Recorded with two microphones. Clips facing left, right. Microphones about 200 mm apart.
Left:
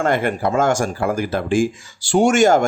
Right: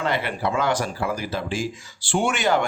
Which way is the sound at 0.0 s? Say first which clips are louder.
Left 6 dB; 50° left (ahead or behind).